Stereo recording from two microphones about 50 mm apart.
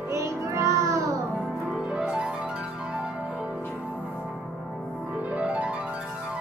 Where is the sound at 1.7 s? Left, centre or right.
Centre.